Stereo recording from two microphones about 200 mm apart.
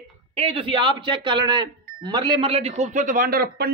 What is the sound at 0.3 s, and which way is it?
Speech, 30° right (ahead or behind).